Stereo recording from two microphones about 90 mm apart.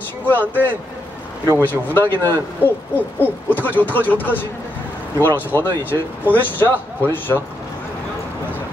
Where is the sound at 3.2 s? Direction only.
20° left (ahead or behind).